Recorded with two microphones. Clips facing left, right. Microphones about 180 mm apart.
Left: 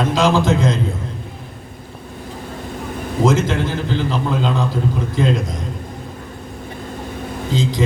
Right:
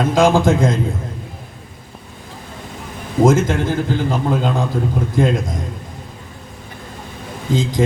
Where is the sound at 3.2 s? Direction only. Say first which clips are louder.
Right 3 dB; 50° right (ahead or behind).